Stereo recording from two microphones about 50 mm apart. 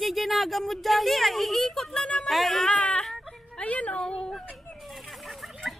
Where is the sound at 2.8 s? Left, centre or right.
Left.